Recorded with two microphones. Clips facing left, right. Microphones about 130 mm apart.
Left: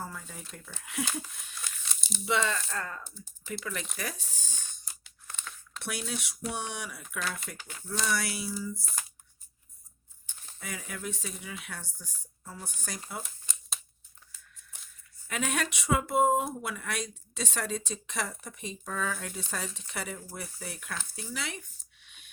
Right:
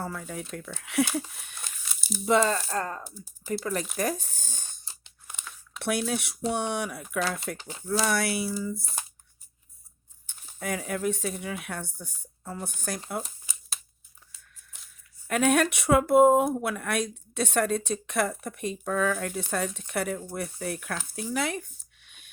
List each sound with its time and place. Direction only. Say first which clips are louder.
0.0 s speech: right 7 dB; 70° right (ahead or behind)
1.5 s crumpling: even; 55° right (ahead or behind)
1.9 s crumpling: right 8 dB; 5° right (ahead or behind)
2.2 s speech: right 7 dB; 40° right (ahead or behind)
5.3 s crumpling: even; 10° right (ahead or behind)
6.1 s speech: right 7 dB; 55° right (ahead or behind)
7.5 s speech: right 7 dB; 20° right (ahead or behind)
7.9 s speech: right 6 dB; 55° right (ahead or behind)
10.6 s speech: right 10 dB; 55° right (ahead or behind)
13.4 s a sound: even; 5° right (ahead or behind)
15.3 s speech: right 9 dB; 50° right (ahead or behind)
21.2 s a sound: right 12 dB; 50° right (ahead or behind)